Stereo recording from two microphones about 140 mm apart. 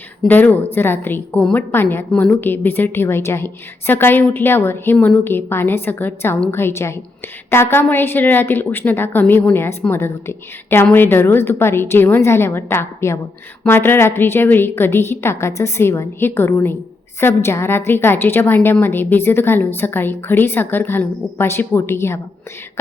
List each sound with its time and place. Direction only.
0.3 s a woman's voice: 10° left (ahead or behind)